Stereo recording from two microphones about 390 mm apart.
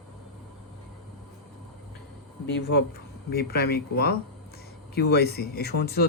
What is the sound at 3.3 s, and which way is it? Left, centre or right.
Speech, left.